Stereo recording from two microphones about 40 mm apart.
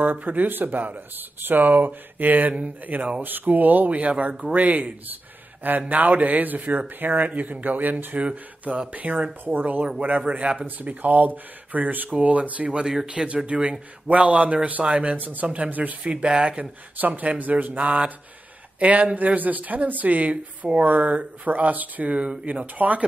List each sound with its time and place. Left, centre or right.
0.0 s speech: right
3.2 s speech: right
4.0 s speech: right
8.2 s speech: right
8.9 s speech: right
9.4 s speech: right
9.9 s speech: right
10.8 s speech: right
13.0 s speech: right
15.4 s speech: right
16.9 s speech: right
19.1 s speech: right
20.2 s speech: right
20.8 s speech: right